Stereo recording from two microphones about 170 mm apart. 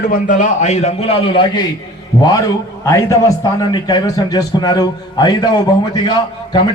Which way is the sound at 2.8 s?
15° left (ahead or behind).